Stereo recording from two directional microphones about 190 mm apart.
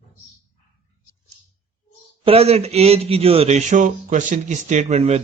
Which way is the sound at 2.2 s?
30° right (ahead or behind).